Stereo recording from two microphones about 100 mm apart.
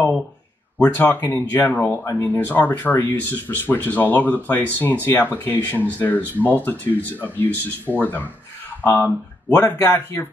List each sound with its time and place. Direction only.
0.7 s speech: 20° left (ahead or behind)